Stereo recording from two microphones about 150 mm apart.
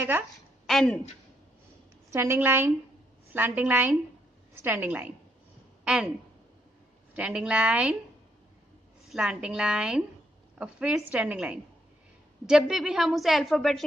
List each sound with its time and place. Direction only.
0.7 s a woman's voice: 5° left (ahead or behind)
2.1 s a woman's voice: 15° right (ahead or behind)
7.2 s a woman's voice: 5° right (ahead or behind)
9.0 s a woman's voice: 5° right (ahead or behind)